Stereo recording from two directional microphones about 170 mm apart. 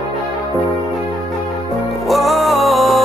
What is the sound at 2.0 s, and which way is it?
Music, centre (ahead or behind).